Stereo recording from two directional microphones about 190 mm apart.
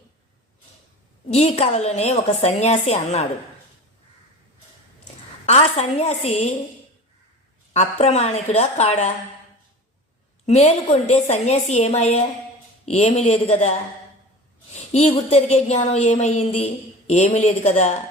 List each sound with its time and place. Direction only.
1.3 s a woman's voice: 35° left (ahead or behind)
5.5 s a woman's voice: 35° left (ahead or behind)
7.7 s a woman's voice: 35° left (ahead or behind)
10.4 s a woman's voice: 35° left (ahead or behind)
14.7 s a sound: 35° left (ahead or behind)
15.1 s a woman's voice: 35° left (ahead or behind)